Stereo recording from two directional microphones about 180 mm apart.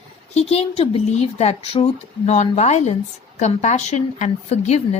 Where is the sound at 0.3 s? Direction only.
35° left (ahead or behind).